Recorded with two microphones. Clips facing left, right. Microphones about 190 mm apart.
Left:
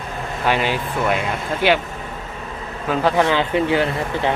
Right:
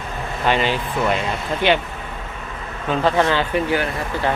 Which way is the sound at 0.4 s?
10° left (ahead or behind).